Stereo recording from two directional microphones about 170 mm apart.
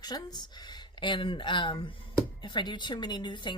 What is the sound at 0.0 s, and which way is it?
Speech, 25° left (ahead or behind).